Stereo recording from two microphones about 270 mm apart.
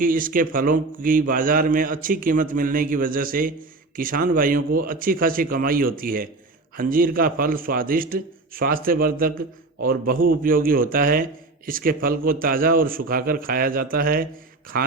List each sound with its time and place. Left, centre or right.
0.0 s a man's voice: right